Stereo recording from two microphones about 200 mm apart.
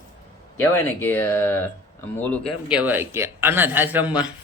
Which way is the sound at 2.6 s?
5° right (ahead or behind).